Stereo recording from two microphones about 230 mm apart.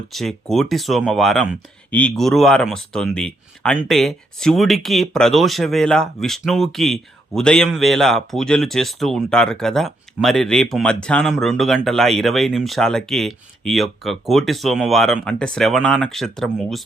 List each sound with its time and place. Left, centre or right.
0.1 s speech: centre